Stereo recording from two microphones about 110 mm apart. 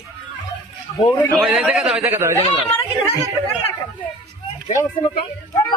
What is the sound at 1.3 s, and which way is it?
Speech, 5° right (ahead or behind).